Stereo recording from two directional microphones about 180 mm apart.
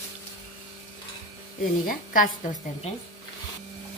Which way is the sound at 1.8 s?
50° left (ahead or behind).